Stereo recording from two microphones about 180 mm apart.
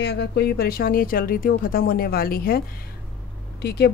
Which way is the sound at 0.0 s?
70° left (ahead or behind).